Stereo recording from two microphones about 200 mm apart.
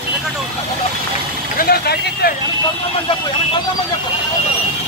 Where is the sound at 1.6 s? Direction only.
50° left (ahead or behind).